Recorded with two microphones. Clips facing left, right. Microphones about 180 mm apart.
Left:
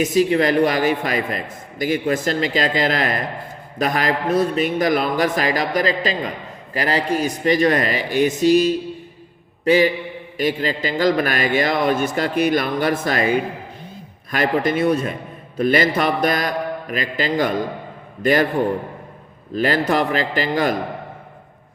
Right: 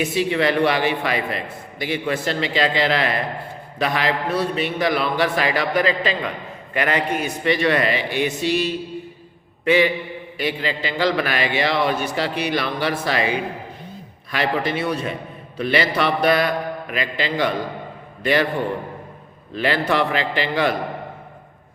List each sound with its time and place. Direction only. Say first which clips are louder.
0.0 s a man's voice: left 3 dB; 40° left (ahead or behind)
19.5 s a man's voice: left 2 dB; 40° left (ahead or behind)